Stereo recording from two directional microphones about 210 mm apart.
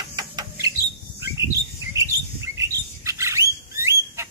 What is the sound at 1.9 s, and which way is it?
Bird, 15° right (ahead or behind).